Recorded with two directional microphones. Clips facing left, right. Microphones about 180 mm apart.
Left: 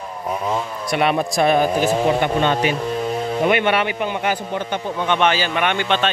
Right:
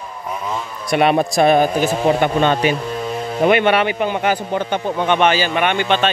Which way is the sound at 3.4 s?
35° right (ahead or behind).